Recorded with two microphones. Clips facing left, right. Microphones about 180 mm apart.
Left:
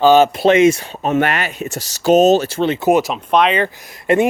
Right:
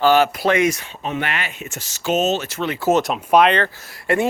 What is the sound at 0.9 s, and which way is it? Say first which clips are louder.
Speech: left 8 dB; 45° left (ahead or behind).